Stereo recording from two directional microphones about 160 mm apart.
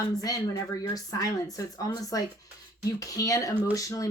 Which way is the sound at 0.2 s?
20° left (ahead or behind).